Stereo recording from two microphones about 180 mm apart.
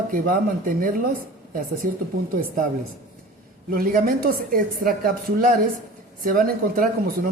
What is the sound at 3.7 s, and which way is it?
Speech, 55° right (ahead or behind).